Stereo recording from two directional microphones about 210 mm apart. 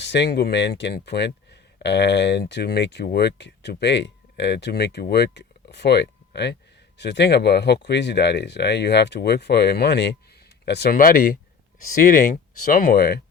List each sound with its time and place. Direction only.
0.0 s speech: 55° left (ahead or behind)